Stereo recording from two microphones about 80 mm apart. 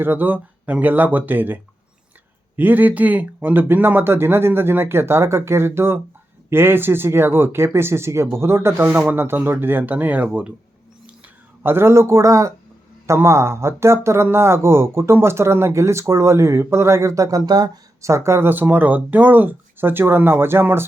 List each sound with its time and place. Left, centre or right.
0.0 s speech: right
2.6 s speech: right
8.9 s speech: right
11.6 s speech: right
18.0 s speech: right